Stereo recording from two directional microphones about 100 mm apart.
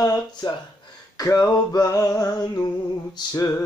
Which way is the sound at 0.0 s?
40° left (ahead or behind).